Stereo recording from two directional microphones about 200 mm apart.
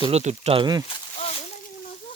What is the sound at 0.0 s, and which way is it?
Speech, 35° right (ahead or behind).